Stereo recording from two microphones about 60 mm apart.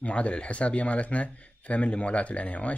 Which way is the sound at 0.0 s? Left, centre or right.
Left.